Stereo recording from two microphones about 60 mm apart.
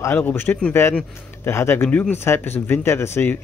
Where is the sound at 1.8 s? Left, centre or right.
Left.